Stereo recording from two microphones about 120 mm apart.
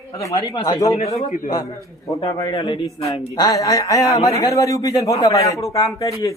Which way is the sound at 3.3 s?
30° left (ahead or behind).